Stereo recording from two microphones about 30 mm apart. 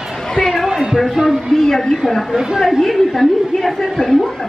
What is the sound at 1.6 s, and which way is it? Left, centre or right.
Speech, centre.